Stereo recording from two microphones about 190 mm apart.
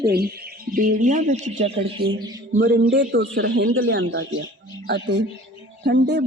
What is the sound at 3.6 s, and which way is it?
A man's voice, 75° right (ahead or behind).